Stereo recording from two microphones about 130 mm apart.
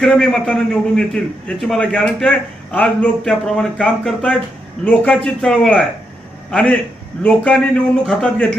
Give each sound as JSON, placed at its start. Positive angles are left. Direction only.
{"t": 0.0, "sound": "a man's voice", "side_deg": 5}